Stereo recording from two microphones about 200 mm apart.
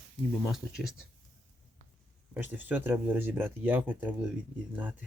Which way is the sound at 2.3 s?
10° right (ahead or behind).